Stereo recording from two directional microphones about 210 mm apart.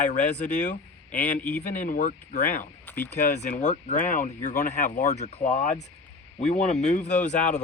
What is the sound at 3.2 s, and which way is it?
Speech, 35° left (ahead or behind).